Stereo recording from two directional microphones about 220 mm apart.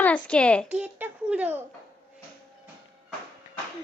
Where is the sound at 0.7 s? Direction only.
5° right (ahead or behind).